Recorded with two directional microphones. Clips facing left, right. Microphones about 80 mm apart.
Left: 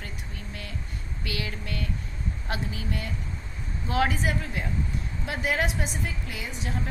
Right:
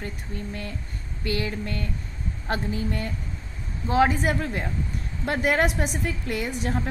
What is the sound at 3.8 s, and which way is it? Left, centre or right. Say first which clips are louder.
Speech: right 5 dB; right.